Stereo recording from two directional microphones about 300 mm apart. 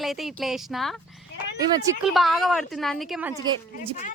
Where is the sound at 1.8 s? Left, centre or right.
Centre.